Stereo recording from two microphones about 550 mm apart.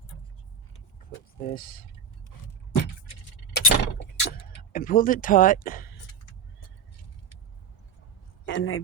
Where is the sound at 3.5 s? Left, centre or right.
Centre.